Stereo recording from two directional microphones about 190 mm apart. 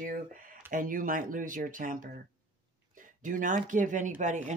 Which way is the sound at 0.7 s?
45° right (ahead or behind).